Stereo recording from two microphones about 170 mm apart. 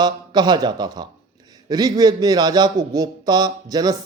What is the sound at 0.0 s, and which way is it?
A man's voice, 25° right (ahead or behind).